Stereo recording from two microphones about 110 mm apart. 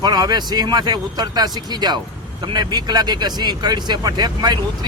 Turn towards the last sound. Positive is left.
turn(degrees=-40)  # may be behind; listen again after turning